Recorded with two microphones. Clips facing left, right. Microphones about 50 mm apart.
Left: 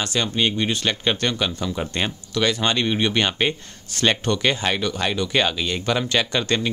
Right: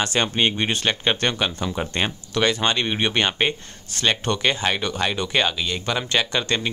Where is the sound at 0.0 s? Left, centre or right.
Right.